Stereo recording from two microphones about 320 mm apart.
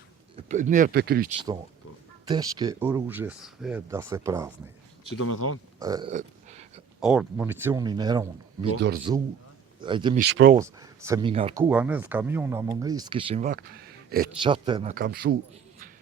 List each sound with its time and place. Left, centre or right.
0.4 s speech: right
2.2 s speech: centre
5.1 s speech: left
5.8 s burping: centre
7.0 s speech: centre
8.8 s speech: right
9.8 s speech: centre
10.2 s speech: right
10.6 s speech: centre; by 14.3 s right
14.4 s speech: centre